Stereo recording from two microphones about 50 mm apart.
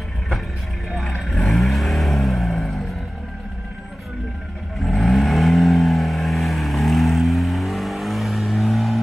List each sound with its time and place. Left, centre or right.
0.9 s vehicle: centre
4.7 s vehicle: centre